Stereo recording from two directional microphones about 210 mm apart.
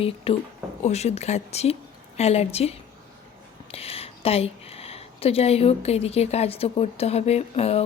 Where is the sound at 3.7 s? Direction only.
30° left (ahead or behind).